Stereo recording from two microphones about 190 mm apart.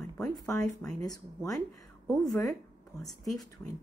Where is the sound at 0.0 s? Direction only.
20° left (ahead or behind).